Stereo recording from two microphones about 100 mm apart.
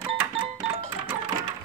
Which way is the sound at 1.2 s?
50° right (ahead or behind).